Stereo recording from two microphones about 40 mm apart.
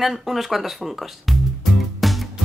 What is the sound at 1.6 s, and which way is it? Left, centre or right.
Music, centre.